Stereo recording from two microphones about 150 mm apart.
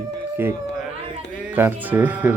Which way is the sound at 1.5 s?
10° right (ahead or behind).